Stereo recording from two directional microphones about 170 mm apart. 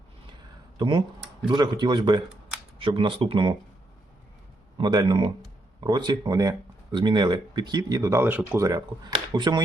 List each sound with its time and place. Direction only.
0.8 s speech: 30° right (ahead or behind)
4.8 s speech: 25° right (ahead or behind)